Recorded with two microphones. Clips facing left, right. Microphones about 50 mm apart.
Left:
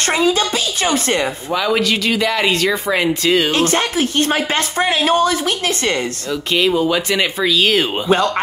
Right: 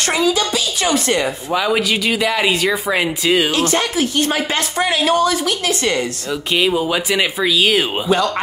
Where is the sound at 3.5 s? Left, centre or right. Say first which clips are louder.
Left 1 dB; left.